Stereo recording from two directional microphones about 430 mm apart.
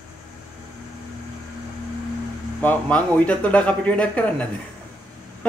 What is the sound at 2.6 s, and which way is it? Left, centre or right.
Speech, centre.